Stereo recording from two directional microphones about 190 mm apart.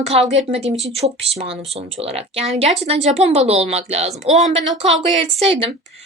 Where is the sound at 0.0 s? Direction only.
35° right (ahead or behind).